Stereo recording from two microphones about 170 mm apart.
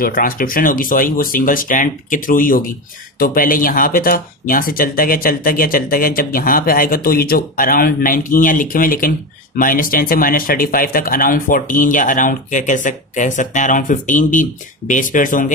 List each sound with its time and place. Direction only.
0.0 s speech: 55° left (ahead or behind)